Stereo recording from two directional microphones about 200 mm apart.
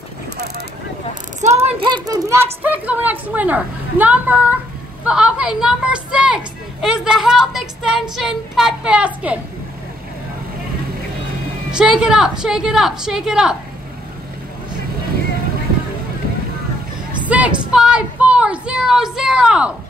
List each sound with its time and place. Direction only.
1.4 s a sound: 35° right (ahead or behind)
1.8 s a woman's voice: 25° right (ahead or behind); by 9.4 s 5° right (ahead or behind)
11.7 s a woman's voice: centre (ahead or behind)
17.3 s a woman's voice: 5° right (ahead or behind)